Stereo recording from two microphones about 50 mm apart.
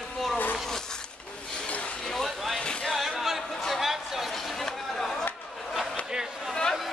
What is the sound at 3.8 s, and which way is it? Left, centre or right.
Chatter, centre.